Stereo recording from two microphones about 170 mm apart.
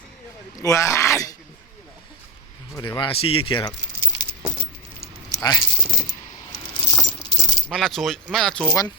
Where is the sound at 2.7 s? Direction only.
25° left (ahead or behind).